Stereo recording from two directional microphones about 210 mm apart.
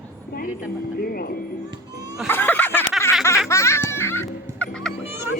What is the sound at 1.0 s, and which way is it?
Music, 45° left (ahead or behind).